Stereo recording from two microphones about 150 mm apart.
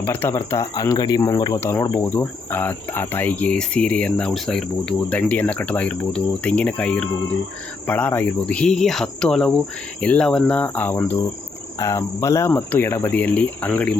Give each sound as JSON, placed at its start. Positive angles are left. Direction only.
{"t": 0.0, "sound": "speech", "side_deg": 15}
{"t": 7.9, "sound": "cricket", "side_deg": 10}
{"t": 10.0, "sound": "speech", "side_deg": 5}